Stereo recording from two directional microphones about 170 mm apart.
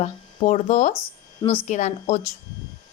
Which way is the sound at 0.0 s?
40° left (ahead or behind).